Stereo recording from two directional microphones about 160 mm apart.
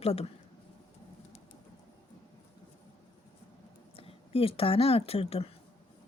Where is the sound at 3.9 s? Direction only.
35° left (ahead or behind).